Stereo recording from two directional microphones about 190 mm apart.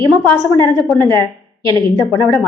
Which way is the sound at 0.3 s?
15° left (ahead or behind).